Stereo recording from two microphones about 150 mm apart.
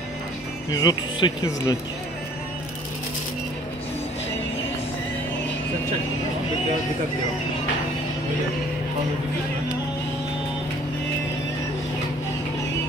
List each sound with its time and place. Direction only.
0.7 s speech: 25° left (ahead or behind)